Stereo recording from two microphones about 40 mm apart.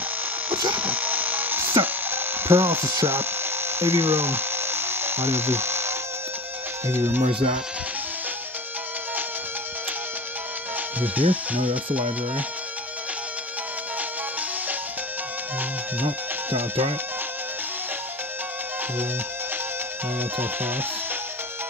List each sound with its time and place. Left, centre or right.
0.5 s electric shaver: right
6.9 s speech: right
11.0 s speech: right
16.0 s speech: right
20.2 s music: right